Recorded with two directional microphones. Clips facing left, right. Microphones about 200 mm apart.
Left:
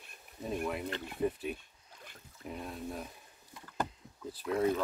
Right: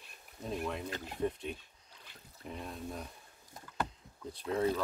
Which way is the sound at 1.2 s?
5° left (ahead or behind).